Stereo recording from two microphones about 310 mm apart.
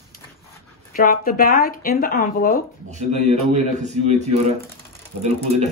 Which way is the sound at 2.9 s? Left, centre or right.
Right.